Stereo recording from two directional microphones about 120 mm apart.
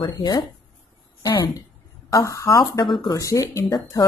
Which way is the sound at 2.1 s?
25° left (ahead or behind).